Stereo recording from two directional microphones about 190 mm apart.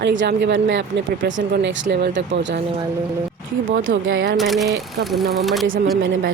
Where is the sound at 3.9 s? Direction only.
85° right.